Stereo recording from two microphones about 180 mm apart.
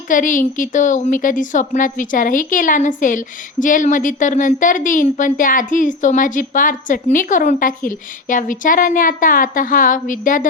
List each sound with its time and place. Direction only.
0.1 s a woman's voice: 45° left (ahead or behind)